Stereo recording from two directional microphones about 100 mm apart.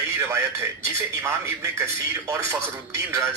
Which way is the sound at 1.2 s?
30° right (ahead or behind).